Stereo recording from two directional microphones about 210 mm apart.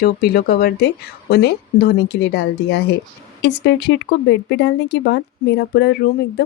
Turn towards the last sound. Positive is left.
turn(degrees=50)  # may be behind; listen again after turning